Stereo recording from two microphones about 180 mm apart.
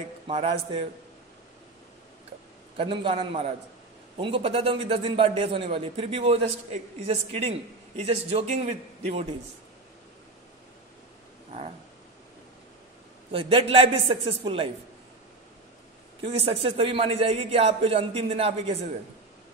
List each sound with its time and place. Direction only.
0.3 s a man's voice: 30° right (ahead or behind)
2.8 s a man's voice: 30° right (ahead or behind)
8.0 s a man's voice: 35° right (ahead or behind)
13.3 s a man's voice: 30° right (ahead or behind)
16.2 s a man's voice: 30° right (ahead or behind)